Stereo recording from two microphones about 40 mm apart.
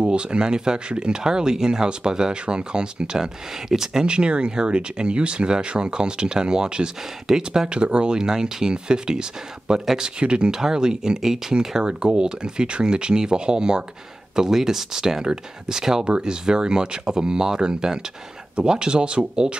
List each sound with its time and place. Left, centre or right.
0.0 s speech: right
4.0 s speech: right
11.9 s speech: right